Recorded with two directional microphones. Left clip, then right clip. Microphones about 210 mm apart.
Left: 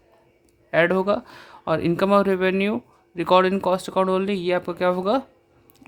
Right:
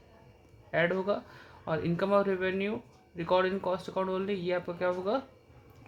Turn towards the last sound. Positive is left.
turn(degrees=45)  # may be behind; listen again after turning